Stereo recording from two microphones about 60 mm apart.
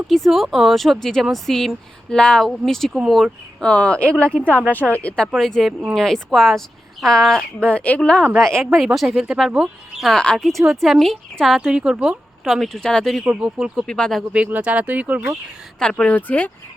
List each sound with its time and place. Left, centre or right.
0.1 s a woman's voice: centre; by 5.1 s left
5.4 s speech: centre
7.7 s a woman's voice: left
8.4 s speech: centre
9.0 s speech: centre
10.2 s a woman's voice: centre
11.6 s speech: centre
12.5 s speech: centre
13.2 s speech: centre
13.8 s speech: centre
14.3 s speech: right
15.8 s speech: centre
16.1 s a woman's voice: left